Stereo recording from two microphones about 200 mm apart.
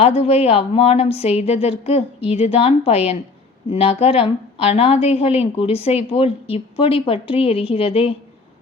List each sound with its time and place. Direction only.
0.0 s a woman's voice: 30° left (ahead or behind)